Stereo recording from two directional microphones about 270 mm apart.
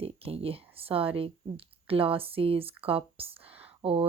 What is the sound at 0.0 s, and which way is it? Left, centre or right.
Speech, right.